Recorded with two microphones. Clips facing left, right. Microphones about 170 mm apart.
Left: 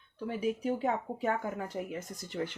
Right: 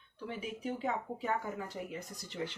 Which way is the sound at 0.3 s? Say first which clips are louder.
Left 7 dB; 40° left (ahead or behind).